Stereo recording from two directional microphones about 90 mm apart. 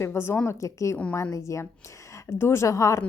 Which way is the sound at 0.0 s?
30° left (ahead or behind).